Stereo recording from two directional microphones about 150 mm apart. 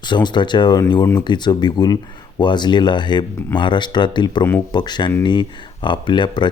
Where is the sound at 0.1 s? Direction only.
30° left (ahead or behind).